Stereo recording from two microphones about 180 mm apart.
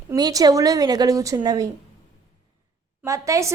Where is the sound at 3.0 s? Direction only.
15° right (ahead or behind).